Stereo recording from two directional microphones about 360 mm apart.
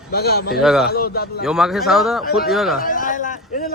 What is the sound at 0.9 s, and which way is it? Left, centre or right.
Speech, left.